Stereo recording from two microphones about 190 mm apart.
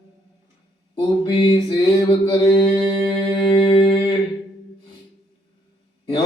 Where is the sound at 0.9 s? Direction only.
25° left (ahead or behind).